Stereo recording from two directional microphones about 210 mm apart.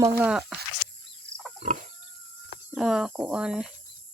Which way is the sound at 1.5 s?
35° right (ahead or behind).